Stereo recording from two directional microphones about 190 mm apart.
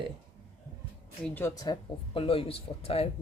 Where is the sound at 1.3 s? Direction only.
15° left (ahead or behind); by 3.0 s 30° left (ahead or behind).